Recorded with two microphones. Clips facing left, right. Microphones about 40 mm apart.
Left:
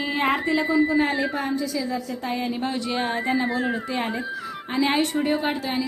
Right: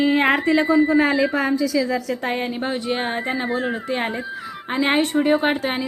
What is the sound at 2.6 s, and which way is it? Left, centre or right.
Speech, right.